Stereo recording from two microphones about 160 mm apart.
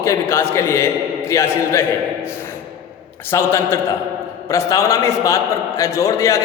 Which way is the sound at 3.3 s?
15° left (ahead or behind).